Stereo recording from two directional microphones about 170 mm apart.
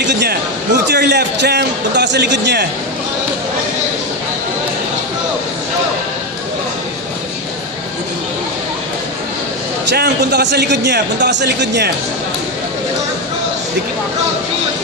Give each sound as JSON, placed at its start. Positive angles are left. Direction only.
{"t": 0.0, "sound": "a sound", "side_deg": -75}
{"t": 0.8, "sound": "a man's voice", "side_deg": -85}
{"t": 9.8, "sound": "a man's voice", "side_deg": -80}